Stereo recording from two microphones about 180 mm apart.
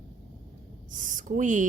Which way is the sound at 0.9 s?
45° right (ahead or behind).